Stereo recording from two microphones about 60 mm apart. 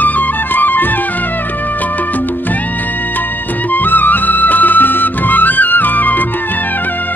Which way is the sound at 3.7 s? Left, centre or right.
Left.